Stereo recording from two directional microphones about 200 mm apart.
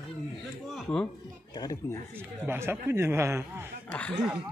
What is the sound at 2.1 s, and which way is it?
Speech, 10° right (ahead or behind).